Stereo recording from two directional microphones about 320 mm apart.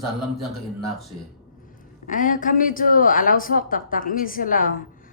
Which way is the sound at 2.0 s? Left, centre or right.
Left.